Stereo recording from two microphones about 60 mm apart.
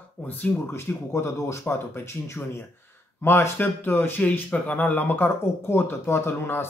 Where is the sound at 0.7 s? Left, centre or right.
Left.